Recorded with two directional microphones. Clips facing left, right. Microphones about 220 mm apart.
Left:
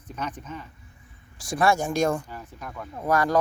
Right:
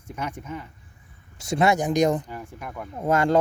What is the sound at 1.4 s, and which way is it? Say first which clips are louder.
Speech: right 2 dB; 25° right (ahead or behind).